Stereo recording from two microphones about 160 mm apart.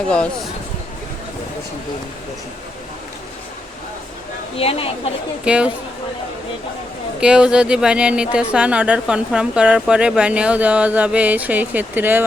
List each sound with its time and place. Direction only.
4.5 s a woman's voice: 35° left (ahead or behind)
5.5 s speech: 5° right (ahead or behind)
7.2 s speech: 5° right (ahead or behind)